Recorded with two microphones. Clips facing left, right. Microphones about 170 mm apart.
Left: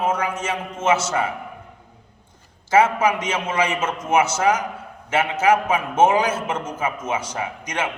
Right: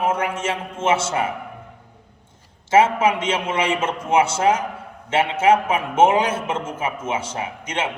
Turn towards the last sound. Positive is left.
turn(degrees=-25)  # may be behind; listen again after turning